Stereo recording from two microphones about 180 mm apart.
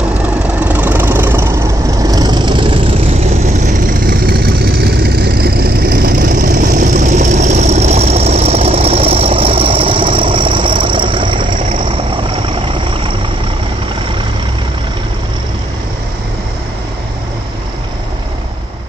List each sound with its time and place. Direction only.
0.6 s vehicle: 10° right (ahead or behind); by 2.8 s 30° right (ahead or behind)
3.4 s vehicle: 45° right (ahead or behind)
6.8 s engine: 45° right (ahead or behind)